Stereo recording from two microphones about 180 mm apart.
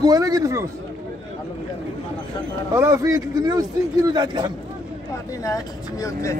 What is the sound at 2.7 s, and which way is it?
A man's voice, 15° right (ahead or behind).